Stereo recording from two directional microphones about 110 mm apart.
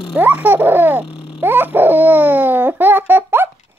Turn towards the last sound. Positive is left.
turn(degrees=-20)  # may be behind; listen again after turning